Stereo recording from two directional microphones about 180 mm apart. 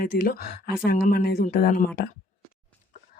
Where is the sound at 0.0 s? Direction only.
55° left (ahead or behind).